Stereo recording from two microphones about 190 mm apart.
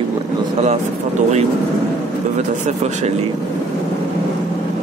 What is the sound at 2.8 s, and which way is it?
Speech, 35° right (ahead or behind).